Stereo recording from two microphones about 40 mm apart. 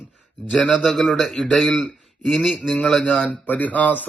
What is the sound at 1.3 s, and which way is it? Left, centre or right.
A man's voice, centre.